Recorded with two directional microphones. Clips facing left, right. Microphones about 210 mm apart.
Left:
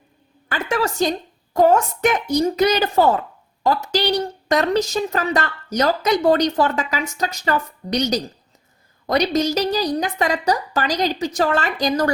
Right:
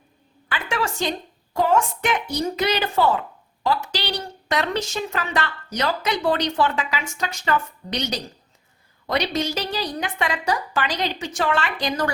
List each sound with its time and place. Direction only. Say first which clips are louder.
0.4 s a woman's voice: left 4 dB; 45° left (ahead or behind)